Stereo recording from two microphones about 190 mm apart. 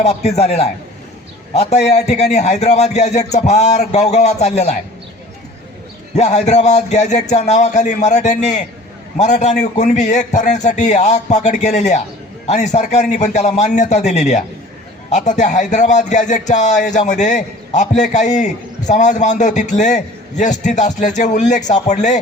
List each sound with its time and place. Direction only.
0.0 s a man's voice: 35° left (ahead or behind)
6.1 s a man's voice: 35° left (ahead or behind)